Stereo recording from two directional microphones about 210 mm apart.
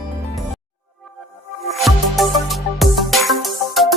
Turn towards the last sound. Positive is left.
turn(degrees=0)  # may be behind; listen again after turning